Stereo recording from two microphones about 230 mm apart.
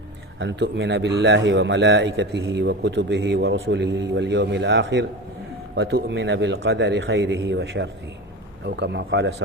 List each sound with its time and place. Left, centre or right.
0.3 s a man's voice: right